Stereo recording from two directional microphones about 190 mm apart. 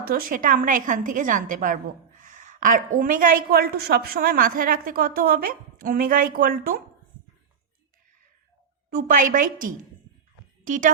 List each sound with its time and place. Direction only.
0.0 s a woman's voice: 50° right (ahead or behind)
8.9 s a woman's voice: 45° right (ahead or behind)